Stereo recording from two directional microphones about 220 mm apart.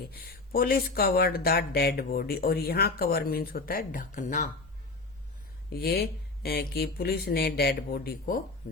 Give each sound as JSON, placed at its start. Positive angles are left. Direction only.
{"t": 0.1, "sound": "speech", "side_deg": 40}
{"t": 5.7, "sound": "speech", "side_deg": 45}